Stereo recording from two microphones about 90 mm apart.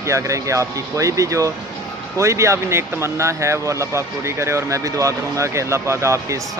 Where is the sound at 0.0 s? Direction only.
35° right (ahead or behind).